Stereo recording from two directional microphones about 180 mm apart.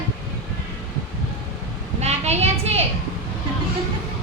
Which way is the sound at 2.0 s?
35° right (ahead or behind).